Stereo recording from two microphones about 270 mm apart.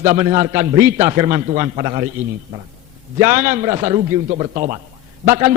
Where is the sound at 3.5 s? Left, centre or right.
Right.